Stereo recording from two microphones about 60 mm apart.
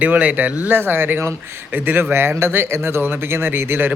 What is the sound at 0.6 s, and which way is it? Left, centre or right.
A man's voice, right.